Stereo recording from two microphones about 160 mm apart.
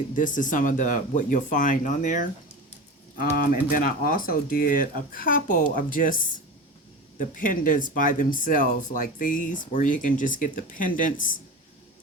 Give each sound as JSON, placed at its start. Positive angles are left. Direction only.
{"t": 0.2, "sound": "speech", "side_deg": 55}
{"t": 3.2, "sound": "speech", "side_deg": 60}
{"t": 7.2, "sound": "speech", "side_deg": 55}